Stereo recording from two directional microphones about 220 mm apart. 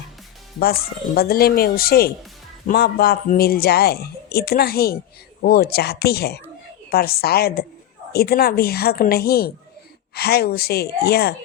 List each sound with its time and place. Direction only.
0.6 s a man's voice: 45° left (ahead or behind)